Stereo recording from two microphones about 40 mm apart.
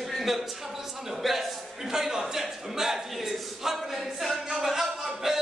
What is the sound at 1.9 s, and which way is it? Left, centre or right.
Speech, centre.